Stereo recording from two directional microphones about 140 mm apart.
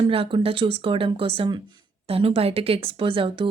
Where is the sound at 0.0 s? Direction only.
40° right (ahead or behind).